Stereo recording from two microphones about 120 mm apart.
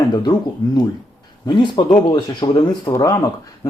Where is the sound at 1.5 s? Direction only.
40° left (ahead or behind).